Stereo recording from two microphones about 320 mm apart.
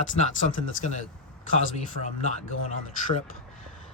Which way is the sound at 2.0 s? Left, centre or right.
Right.